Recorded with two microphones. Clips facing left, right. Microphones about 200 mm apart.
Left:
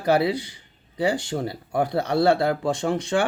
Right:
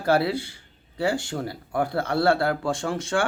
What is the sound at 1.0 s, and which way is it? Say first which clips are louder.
Speech: left 2 dB; 20° left (ahead or behind).